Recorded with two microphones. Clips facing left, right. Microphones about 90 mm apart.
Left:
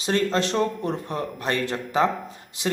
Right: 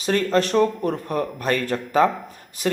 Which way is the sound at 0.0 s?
30° left (ahead or behind).